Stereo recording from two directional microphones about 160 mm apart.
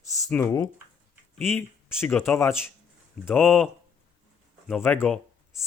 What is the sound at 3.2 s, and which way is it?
Speech, centre (ahead or behind).